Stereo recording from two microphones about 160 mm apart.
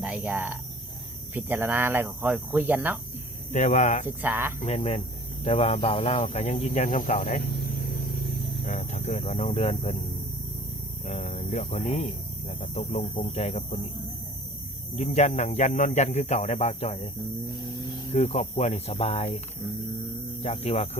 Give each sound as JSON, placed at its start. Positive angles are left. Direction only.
{"t": 0.0, "sound": "speech", "side_deg": -10}
{"t": 3.5, "sound": "speech", "side_deg": 45}
{"t": 4.0, "sound": "speech", "side_deg": -10}
{"t": 4.6, "sound": "speech", "side_deg": 40}
{"t": 8.6, "sound": "speech", "side_deg": 50}
{"t": 11.0, "sound": "speech", "side_deg": 45}
{"t": 14.9, "sound": "speech", "side_deg": 45}
{"t": 18.1, "sound": "speech", "side_deg": 40}
{"t": 20.4, "sound": "speech", "side_deg": 40}